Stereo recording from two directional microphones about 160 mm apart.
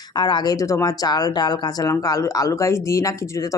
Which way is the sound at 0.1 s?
25° left (ahead or behind).